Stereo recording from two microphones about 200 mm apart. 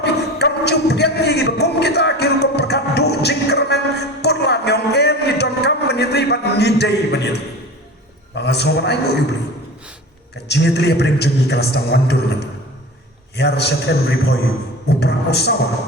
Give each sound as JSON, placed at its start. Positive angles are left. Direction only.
{"t": 0.0, "sound": "a sound", "side_deg": 55}
{"t": 8.4, "sound": "a man's voice", "side_deg": 55}
{"t": 10.3, "sound": "a man's voice", "side_deg": 55}